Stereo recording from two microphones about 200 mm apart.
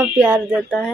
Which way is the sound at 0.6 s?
5° left (ahead or behind).